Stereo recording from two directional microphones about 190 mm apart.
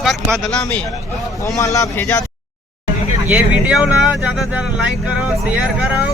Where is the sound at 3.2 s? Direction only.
5° right (ahead or behind).